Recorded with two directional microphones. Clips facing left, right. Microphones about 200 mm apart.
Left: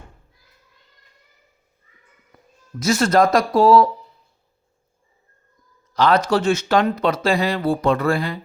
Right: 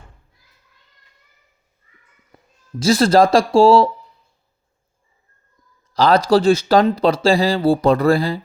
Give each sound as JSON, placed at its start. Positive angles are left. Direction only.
{"t": 2.7, "sound": "speech", "side_deg": -30}
{"t": 5.9, "sound": "speech", "side_deg": -35}